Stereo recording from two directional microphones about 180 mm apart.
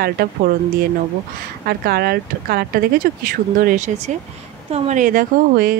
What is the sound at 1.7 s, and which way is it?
A woman's voice, 60° right (ahead or behind).